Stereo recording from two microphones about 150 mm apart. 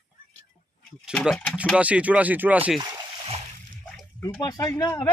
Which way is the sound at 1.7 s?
10° right (ahead or behind).